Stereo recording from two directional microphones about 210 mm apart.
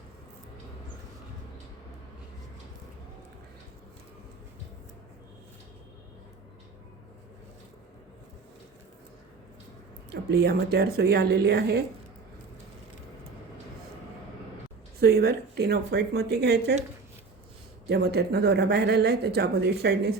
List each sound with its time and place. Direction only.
10.1 s speech: 50° right (ahead or behind)
14.9 s speech: 50° right (ahead or behind)
17.8 s speech: 50° right (ahead or behind)